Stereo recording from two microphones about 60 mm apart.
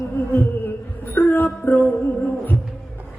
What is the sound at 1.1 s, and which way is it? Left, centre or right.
Music, left.